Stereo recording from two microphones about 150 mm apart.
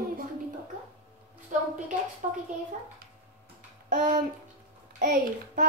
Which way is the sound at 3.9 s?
60° right (ahead or behind).